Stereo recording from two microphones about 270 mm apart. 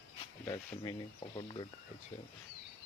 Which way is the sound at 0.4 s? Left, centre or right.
Centre.